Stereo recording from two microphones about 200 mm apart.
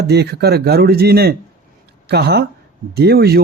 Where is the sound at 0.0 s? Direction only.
55° right (ahead or behind).